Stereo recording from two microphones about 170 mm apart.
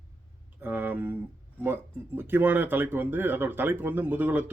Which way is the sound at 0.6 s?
10° right (ahead or behind).